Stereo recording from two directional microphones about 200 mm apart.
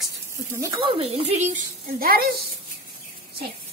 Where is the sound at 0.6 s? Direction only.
25° right (ahead or behind); by 2.3 s 50° right (ahead or behind).